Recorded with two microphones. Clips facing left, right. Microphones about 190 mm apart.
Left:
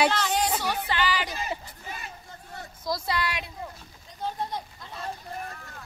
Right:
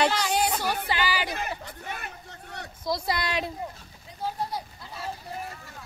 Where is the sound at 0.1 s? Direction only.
10° right (ahead or behind).